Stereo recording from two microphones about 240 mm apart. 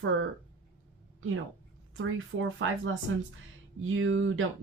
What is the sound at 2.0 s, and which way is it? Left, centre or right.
Speech, right.